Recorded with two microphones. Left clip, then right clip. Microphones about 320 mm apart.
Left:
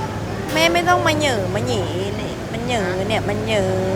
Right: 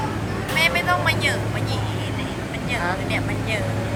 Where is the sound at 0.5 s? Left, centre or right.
Left.